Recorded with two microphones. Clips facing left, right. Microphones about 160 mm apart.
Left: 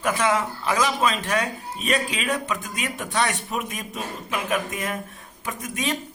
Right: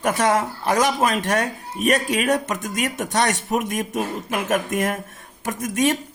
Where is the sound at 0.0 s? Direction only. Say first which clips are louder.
Right 3 dB; 50° right (ahead or behind).